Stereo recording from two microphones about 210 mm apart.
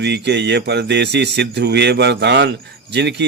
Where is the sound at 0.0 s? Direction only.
55° right (ahead or behind).